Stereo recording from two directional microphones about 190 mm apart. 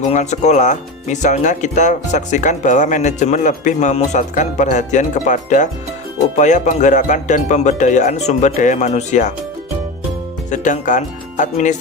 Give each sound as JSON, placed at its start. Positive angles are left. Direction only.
{"t": 0.1, "sound": "speech", "side_deg": 35}
{"t": 10.5, "sound": "speech", "side_deg": 40}